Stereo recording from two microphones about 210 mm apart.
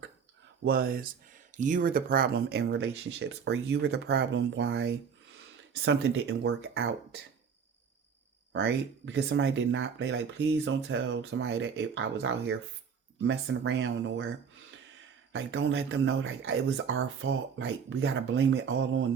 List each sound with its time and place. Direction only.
0.6 s speech: 45° right (ahead or behind)
8.5 s speech: 60° right (ahead or behind)
13.2 s speech: 65° right (ahead or behind)
15.3 s speech: 60° right (ahead or behind)